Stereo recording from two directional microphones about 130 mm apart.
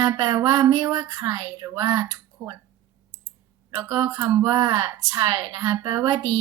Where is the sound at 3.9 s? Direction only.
30° right (ahead or behind).